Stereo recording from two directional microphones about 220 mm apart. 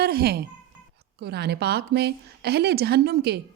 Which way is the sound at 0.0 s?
45° right (ahead or behind).